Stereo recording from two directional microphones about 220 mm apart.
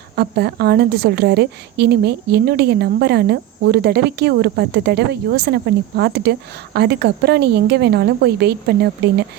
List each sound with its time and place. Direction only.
0.2 s a woman's voice: 45° right (ahead or behind)